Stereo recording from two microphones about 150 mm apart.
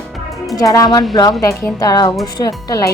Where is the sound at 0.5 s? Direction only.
25° left (ahead or behind).